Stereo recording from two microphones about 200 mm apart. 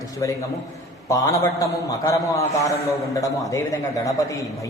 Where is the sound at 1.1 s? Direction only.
15° left (ahead or behind).